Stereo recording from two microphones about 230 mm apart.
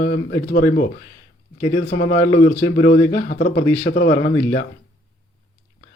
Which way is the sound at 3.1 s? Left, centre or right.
Left.